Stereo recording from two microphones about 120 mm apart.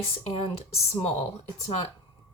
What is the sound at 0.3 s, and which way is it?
Speech, 60° left (ahead or behind).